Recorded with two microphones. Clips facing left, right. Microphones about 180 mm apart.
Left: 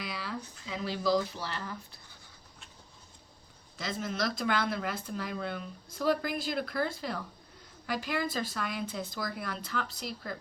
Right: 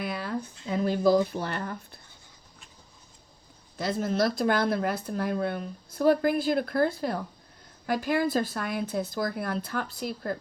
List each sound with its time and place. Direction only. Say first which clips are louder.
0.0 s a sound: right 6 dB; 50° right (ahead or behind)
0.6 s speech: right 9 dB; 50° right (ahead or behind)
4.2 s speech: right 6 dB; 50° right (ahead or behind)